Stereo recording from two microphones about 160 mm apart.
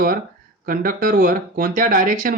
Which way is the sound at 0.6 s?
65° right (ahead or behind).